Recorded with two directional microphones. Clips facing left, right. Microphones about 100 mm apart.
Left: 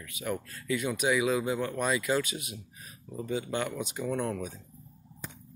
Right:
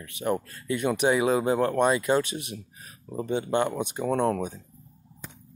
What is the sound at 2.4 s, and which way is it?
Speech, 50° right (ahead or behind).